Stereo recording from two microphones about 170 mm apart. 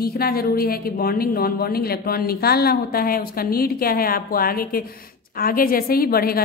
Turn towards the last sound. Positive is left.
turn(degrees=60)  # may be behind; listen again after turning